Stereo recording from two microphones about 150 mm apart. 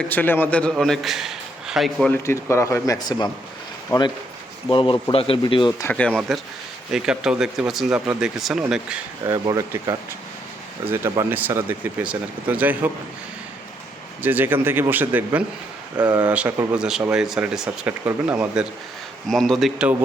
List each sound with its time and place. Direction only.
0.0 s a man's voice: 10° left (ahead or behind)
2.0 s speech: 15° left (ahead or behind)
4.7 s speech: 35° left (ahead or behind)
5.9 s a man's voice: 5° left (ahead or behind)
9.3 s speech: 25° right (ahead or behind)
14.2 s a man's voice: 10° right (ahead or behind)